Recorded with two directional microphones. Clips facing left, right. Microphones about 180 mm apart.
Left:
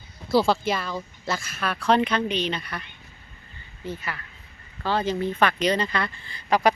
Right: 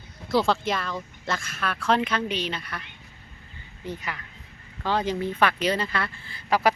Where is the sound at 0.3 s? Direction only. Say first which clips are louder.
Left 2 dB; 5° left (ahead or behind).